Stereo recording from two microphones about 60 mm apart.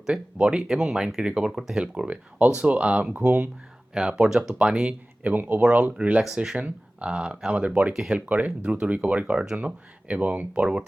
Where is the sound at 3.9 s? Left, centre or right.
Centre.